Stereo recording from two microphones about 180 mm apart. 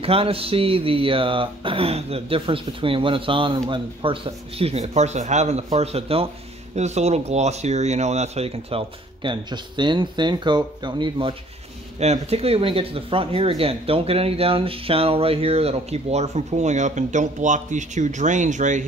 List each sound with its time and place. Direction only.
0.0 s speech: 30° right (ahead or behind)